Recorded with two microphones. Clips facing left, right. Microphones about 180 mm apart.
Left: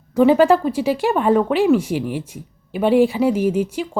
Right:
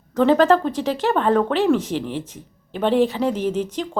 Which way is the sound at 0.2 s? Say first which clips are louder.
Left 2 dB; 10° left (ahead or behind).